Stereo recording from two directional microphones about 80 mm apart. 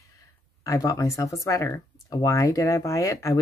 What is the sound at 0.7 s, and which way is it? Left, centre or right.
Speech, left.